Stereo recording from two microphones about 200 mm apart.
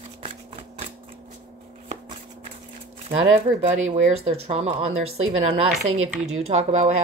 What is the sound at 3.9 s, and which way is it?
Speech, 30° right (ahead or behind).